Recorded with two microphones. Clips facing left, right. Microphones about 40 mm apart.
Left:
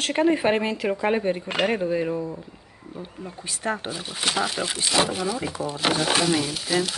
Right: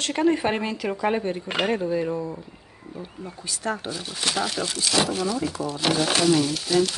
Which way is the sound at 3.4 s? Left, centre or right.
Left.